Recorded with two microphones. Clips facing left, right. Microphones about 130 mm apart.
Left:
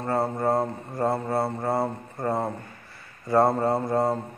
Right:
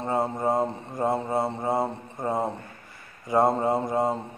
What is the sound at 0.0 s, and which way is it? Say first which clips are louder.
Speech: left 1 dB; 15° right (ahead or behind).